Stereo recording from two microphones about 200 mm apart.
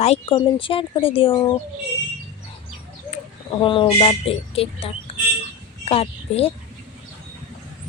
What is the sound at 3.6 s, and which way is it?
Speech, 25° left (ahead or behind).